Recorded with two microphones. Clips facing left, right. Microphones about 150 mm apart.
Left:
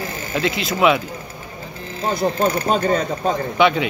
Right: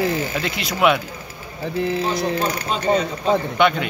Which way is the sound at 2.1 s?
50° left (ahead or behind).